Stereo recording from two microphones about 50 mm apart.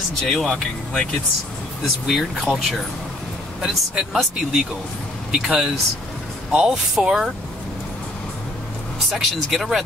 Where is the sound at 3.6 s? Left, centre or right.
Centre.